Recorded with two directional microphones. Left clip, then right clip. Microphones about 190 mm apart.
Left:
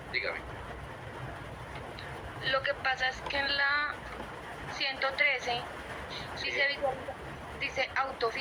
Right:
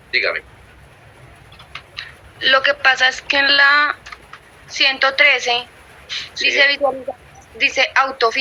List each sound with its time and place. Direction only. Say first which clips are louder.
0.1 s a woman's voice: right 15 dB; 55° right (ahead or behind)
1.7 s a woman's voice: right 12 dB; 55° right (ahead or behind)